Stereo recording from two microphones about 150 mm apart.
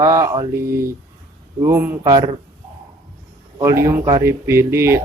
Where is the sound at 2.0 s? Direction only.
25° right (ahead or behind).